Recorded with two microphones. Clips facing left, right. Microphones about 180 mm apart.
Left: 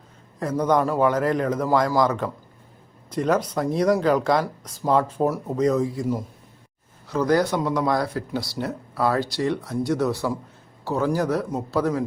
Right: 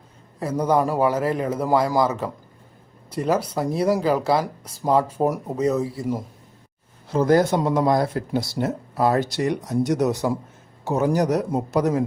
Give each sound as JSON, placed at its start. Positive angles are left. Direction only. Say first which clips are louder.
{"t": 0.3, "sound": "speech", "louder": "even", "side_deg": -10}
{"t": 7.3, "sound": "speech", "louder": "right 3 dB", "side_deg": -50}
{"t": 7.5, "sound": "speech", "louder": "right 3 dB", "side_deg": -25}